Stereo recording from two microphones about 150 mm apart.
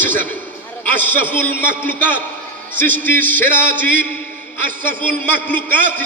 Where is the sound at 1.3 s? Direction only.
15° left (ahead or behind).